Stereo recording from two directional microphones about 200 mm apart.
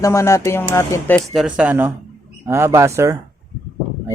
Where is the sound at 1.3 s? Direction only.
5° right (ahead or behind).